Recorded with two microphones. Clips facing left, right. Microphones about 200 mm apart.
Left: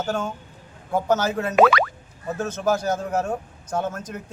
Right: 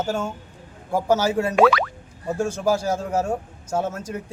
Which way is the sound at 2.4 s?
30° right (ahead or behind).